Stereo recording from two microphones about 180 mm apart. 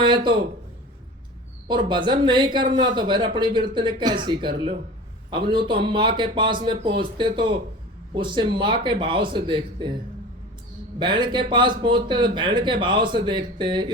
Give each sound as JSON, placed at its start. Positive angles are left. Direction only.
{"t": 1.6, "sound": "speech", "side_deg": -25}
{"t": 11.0, "sound": "speech", "side_deg": -25}